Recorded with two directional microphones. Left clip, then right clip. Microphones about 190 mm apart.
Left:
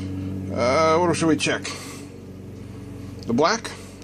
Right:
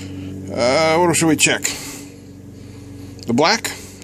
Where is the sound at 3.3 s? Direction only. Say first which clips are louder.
Right 5 dB; 30° right (ahead or behind).